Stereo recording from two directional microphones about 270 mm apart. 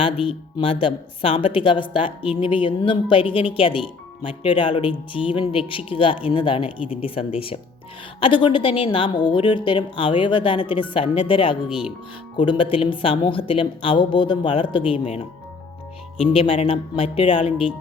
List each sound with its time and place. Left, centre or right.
0.0 s speech: centre
11.7 s speech: centre
12.4 s speech: centre